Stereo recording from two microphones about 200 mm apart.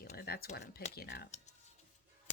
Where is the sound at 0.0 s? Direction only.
50° left (ahead or behind).